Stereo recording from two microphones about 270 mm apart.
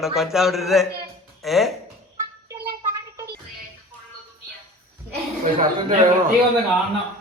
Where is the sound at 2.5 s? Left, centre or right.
Centre.